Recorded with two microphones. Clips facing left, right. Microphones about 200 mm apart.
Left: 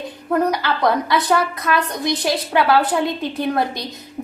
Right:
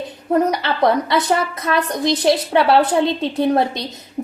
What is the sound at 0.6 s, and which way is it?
A woman's voice, 25° right (ahead or behind).